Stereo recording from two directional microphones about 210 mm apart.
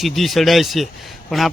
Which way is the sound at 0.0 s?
Centre (ahead or behind).